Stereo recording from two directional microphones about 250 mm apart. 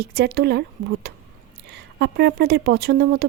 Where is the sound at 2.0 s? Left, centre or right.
Right.